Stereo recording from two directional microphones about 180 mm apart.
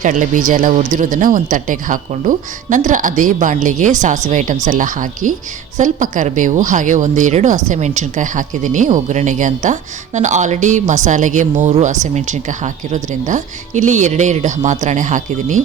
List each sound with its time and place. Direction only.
0.0 s speech: 45° right (ahead or behind)